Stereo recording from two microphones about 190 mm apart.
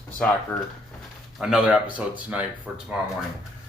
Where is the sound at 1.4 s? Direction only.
5° right (ahead or behind).